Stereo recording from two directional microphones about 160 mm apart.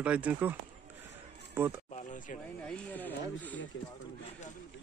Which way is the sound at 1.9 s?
50° left (ahead or behind).